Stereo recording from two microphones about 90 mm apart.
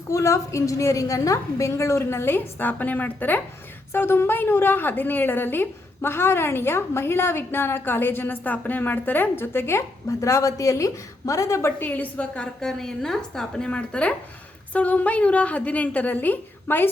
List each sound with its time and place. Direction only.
0.1 s a woman's voice: 35° left (ahead or behind)
11.8 s a woman's voice: 20° left (ahead or behind)